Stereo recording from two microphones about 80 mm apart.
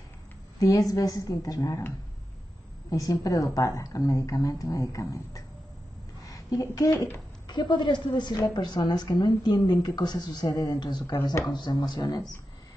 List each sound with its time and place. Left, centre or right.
0.6 s speech: left
2.9 s speech: left
7.4 s a woman's voice: left